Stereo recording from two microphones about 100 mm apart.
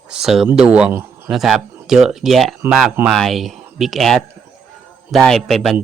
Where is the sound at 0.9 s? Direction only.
20° right (ahead or behind).